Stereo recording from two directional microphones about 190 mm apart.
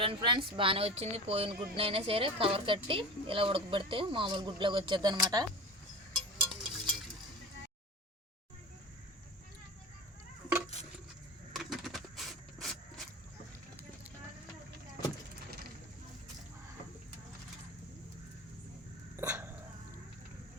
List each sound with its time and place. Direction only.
0.0 s speech: 25° right (ahead or behind)
6.1 s a sound: centre (ahead or behind)
11.5 s coin: centre (ahead or behind)
19.1 s dog: 15° right (ahead or behind)